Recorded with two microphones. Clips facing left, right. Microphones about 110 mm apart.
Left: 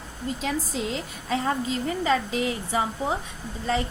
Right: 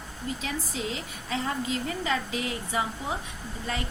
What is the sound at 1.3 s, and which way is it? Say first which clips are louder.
A woman's voice: left 4 dB; 35° left (ahead or behind).